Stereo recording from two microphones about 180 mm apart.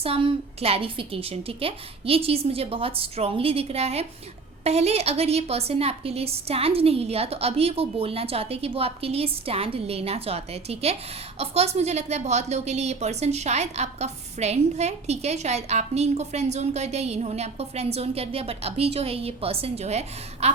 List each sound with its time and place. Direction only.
0.0 s a woman's voice: 35° right (ahead or behind)